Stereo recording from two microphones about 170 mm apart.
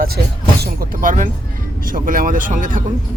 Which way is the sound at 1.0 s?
50° right (ahead or behind).